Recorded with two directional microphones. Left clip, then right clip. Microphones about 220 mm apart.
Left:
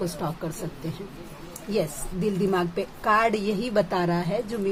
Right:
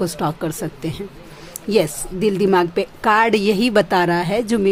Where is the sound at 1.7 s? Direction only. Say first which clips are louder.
Right 10 dB; 45° right (ahead or behind).